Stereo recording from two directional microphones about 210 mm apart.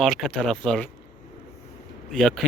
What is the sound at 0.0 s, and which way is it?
Speech, centre (ahead or behind).